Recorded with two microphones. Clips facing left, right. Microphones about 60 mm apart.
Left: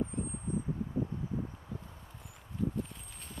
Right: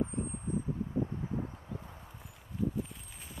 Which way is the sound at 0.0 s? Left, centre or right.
Right.